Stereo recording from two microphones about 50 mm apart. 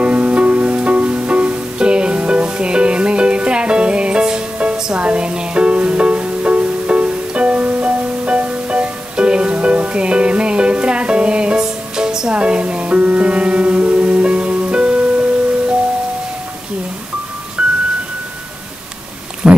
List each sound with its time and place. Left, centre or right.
0.0 s music: right
17.6 s music: right
19.4 s a sound: centre